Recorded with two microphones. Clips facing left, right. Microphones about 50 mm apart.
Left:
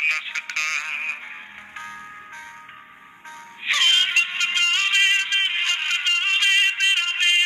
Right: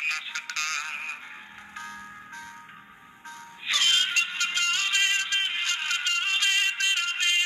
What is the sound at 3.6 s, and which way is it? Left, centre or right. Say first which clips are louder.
Synthetic singing: left 5 dB; left.